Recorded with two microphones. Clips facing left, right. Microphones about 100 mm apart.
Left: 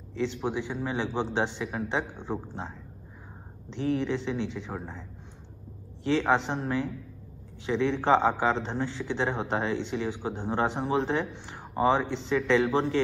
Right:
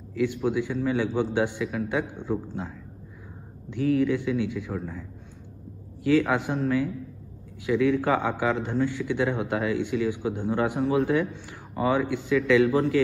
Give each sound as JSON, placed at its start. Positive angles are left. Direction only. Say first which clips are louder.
{"t": 0.1, "sound": "a man's voice", "louder": "right 4 dB", "side_deg": 25}
{"t": 3.7, "sound": "a man's voice", "louder": "right 5 dB", "side_deg": 25}
{"t": 6.0, "sound": "a man's voice", "louder": "right 3 dB", "side_deg": 25}